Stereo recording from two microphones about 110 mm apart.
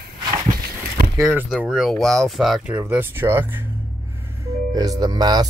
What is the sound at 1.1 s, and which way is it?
Speech, 20° right (ahead or behind).